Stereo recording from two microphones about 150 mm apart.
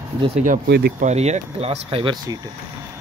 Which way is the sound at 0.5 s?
90° right.